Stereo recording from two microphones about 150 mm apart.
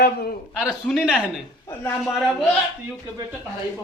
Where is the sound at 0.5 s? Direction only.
5° right (ahead or behind).